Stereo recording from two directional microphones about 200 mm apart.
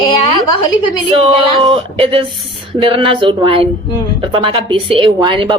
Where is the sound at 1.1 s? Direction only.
30° right (ahead or behind).